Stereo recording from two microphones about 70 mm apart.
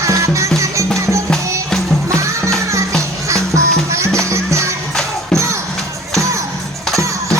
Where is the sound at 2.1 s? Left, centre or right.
Right.